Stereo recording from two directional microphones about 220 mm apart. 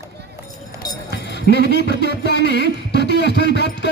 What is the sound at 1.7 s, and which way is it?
Music, 50° left (ahead or behind).